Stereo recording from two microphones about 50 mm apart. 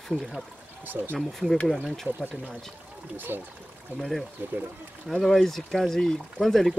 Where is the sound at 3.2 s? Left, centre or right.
Right.